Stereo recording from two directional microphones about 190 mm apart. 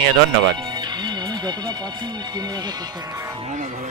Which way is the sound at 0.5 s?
25° right (ahead or behind).